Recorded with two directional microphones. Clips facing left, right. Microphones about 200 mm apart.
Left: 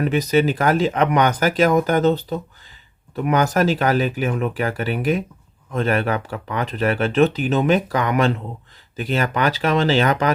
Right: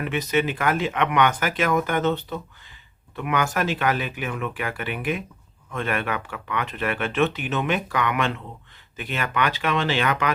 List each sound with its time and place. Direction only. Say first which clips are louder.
0.0 s speech: left 6 dB; 40° left (ahead or behind)